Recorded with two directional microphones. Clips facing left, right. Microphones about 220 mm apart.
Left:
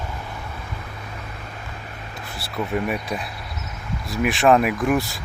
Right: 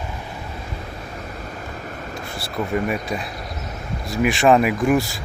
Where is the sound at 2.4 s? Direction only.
Centre (ahead or behind).